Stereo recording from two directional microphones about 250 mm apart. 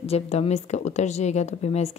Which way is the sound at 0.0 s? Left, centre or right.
Left.